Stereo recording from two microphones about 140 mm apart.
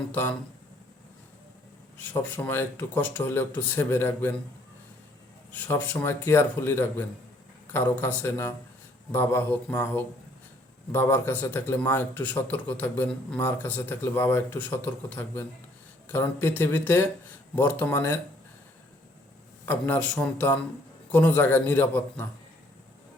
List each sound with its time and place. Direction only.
0.1 s a man's voice: 15° left (ahead or behind)
2.1 s a man's voice: 10° left (ahead or behind)
5.5 s a man's voice: 10° left (ahead or behind)
19.6 s a man's voice: 10° left (ahead or behind)